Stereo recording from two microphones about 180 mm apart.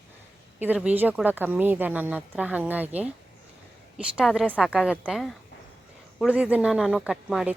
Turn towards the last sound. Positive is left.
turn(degrees=0)  # may be behind; listen again after turning